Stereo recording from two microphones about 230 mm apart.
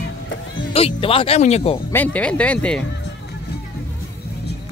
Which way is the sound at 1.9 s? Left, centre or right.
Centre.